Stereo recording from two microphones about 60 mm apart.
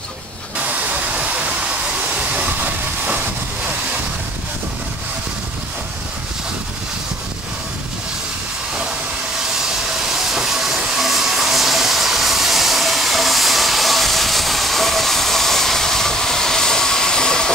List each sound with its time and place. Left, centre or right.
1.1 s train: centre
10.1 s steam: centre